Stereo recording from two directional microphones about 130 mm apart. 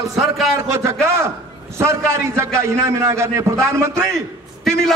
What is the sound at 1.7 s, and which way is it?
A man's voice, 20° right (ahead or behind).